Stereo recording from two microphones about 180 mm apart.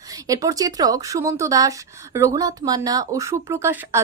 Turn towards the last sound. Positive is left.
turn(degrees=-15)  # may be behind; listen again after turning